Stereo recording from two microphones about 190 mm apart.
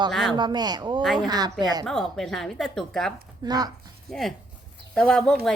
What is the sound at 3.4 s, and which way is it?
Speech, 20° right (ahead or behind).